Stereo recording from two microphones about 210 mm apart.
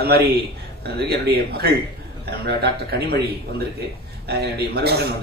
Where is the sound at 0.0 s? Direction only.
50° right (ahead or behind).